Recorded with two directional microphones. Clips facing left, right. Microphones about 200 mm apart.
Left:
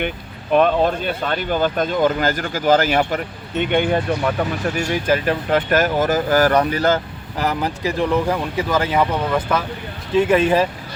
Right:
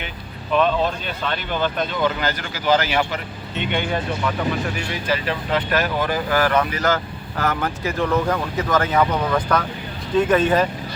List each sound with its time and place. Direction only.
0.5 s speech: 50° left (ahead or behind); by 7.0 s 30° left (ahead or behind)
7.3 s speech: 15° left (ahead or behind)